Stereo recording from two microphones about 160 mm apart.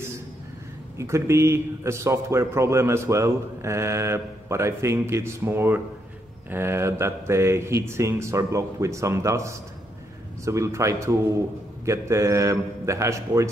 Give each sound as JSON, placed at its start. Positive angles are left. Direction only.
{"t": 0.9, "sound": "a man's voice", "side_deg": -15}